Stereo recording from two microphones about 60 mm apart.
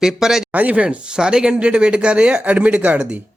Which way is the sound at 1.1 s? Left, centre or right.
Centre.